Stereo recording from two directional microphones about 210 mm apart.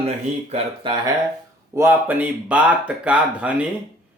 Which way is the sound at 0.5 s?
25° right (ahead or behind).